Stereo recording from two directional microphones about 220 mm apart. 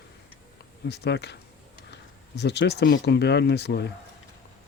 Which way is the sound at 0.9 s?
50° left (ahead or behind).